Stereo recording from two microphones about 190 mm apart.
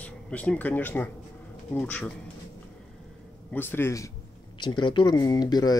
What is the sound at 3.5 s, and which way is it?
Speech, 10° left (ahead or behind).